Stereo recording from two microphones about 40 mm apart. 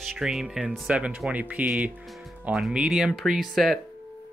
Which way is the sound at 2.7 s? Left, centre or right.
Right.